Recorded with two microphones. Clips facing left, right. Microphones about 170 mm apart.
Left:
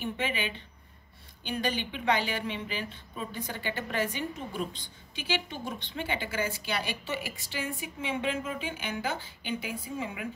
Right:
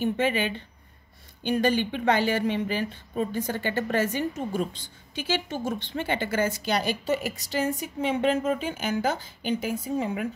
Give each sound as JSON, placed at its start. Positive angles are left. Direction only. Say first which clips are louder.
{"t": 0.0, "sound": "a woman's voice", "louder": "right 8 dB", "side_deg": -45}